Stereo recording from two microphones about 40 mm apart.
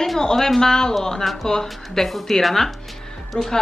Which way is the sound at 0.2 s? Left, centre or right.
Centre.